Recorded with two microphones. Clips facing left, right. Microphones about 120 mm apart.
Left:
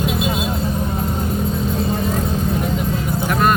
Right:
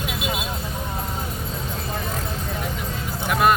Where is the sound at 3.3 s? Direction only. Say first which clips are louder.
Left 1 dB; 5° right (ahead or behind).